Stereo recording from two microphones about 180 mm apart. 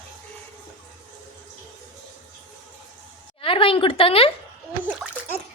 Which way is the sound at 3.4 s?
30° left (ahead or behind).